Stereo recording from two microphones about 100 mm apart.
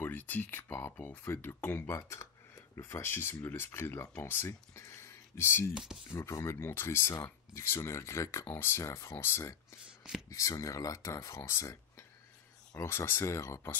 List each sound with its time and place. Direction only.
0.0 s speech: 20° left (ahead or behind)